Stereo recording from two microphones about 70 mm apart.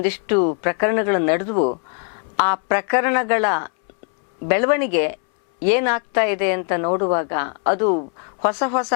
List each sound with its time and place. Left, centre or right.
0.0 s a woman's voice: centre
8.5 s a woman's voice: centre